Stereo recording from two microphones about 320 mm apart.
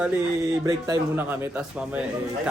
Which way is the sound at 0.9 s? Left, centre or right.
Centre.